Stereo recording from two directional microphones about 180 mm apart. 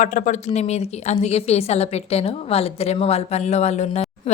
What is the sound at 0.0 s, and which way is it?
A woman's voice, 45° left (ahead or behind).